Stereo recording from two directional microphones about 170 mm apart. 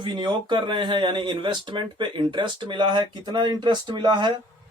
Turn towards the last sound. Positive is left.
turn(degrees=-25)  # may be behind; listen again after turning